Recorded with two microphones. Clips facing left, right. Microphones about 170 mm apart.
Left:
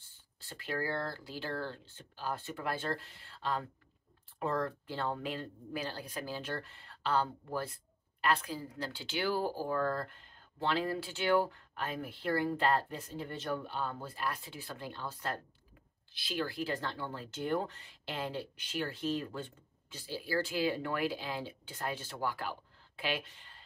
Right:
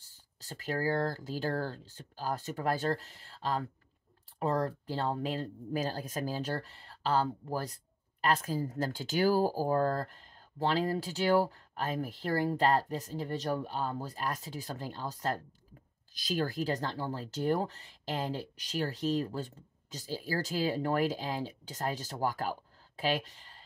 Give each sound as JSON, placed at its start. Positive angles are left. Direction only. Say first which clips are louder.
{"t": 0.0, "sound": "speech", "louder": "right 3 dB", "side_deg": -40}